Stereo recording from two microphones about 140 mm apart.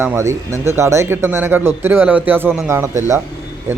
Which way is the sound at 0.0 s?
15° right (ahead or behind).